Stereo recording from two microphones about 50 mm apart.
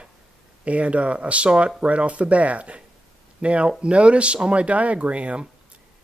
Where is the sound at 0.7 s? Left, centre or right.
Right.